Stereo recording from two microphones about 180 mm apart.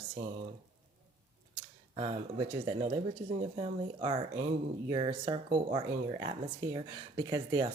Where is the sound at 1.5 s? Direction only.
30° right (ahead or behind).